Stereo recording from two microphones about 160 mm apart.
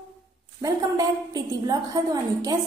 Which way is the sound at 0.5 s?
25° right (ahead or behind).